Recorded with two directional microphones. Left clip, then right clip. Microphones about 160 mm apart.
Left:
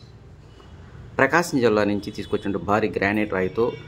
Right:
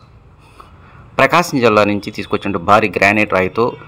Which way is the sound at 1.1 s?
25° right (ahead or behind).